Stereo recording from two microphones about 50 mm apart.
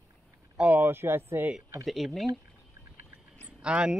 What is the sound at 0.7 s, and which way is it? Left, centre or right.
Speech, right.